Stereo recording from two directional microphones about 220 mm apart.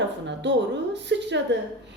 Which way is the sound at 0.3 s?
55° right (ahead or behind).